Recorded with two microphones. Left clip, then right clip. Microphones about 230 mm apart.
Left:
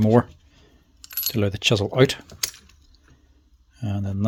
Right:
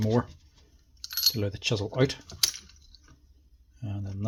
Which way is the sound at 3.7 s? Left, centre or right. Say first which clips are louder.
Left 10 dB; left.